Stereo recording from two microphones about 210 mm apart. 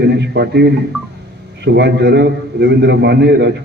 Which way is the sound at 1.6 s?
55° right (ahead or behind).